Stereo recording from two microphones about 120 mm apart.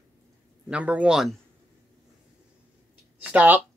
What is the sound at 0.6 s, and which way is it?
Speech, 10° right (ahead or behind).